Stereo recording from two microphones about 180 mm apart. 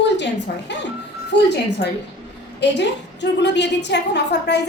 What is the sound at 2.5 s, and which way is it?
A woman's voice, 75° left (ahead or behind).